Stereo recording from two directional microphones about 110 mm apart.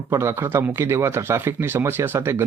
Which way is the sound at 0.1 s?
25° right (ahead or behind).